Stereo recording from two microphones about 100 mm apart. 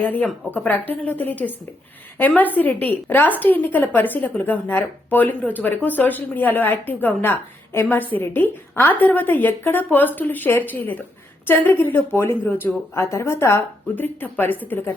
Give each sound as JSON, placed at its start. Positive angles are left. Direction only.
{"t": 0.0, "sound": "a woman's voice", "side_deg": 15}